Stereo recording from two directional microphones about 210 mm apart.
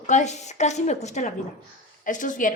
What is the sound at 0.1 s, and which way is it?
A woman's voice, 35° left (ahead or behind).